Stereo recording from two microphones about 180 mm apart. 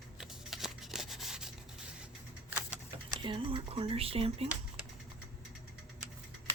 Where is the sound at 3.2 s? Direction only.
30° right (ahead or behind).